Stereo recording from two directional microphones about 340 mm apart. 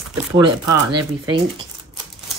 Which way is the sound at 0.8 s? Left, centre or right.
Right.